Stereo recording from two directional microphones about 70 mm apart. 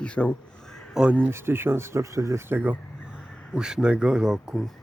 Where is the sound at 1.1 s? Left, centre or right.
Right.